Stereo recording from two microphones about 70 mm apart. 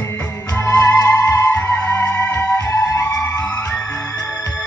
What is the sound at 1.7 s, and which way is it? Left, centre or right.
Music, centre.